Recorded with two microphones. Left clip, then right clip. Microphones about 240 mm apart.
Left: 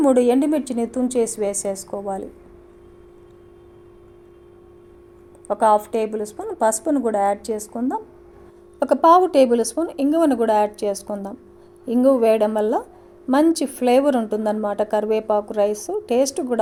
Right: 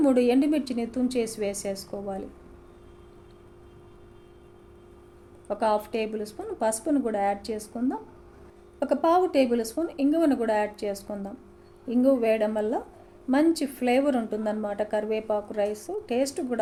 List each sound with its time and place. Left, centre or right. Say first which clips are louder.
0.0 s a woman's voice: left 6 dB; left
5.5 s a woman's voice: left 9 dB; left